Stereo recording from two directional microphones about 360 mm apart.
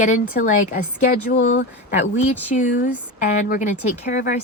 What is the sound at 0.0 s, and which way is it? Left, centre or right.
Speech, left.